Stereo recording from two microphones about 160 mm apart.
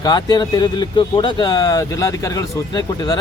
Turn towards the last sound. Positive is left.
turn(degrees=25)  # may be behind; listen again after turning